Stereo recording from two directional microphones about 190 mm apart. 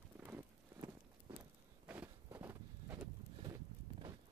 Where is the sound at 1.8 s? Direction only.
10° right (ahead or behind).